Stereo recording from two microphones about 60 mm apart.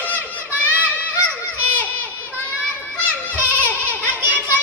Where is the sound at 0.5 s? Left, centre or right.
Right.